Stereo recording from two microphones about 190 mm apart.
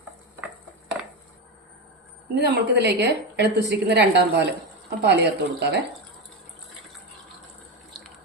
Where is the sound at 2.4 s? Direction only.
65° right (ahead or behind).